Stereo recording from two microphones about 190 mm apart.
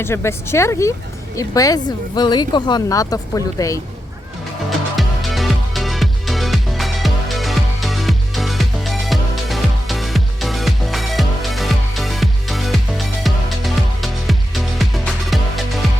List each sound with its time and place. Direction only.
0.0 s speech: 15° left (ahead or behind)
4.9 s music: centre (ahead or behind)